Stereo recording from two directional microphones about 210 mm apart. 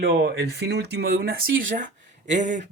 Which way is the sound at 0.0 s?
50° right (ahead or behind).